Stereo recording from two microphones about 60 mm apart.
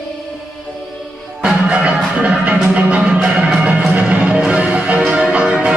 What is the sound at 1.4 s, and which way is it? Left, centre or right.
Music, centre.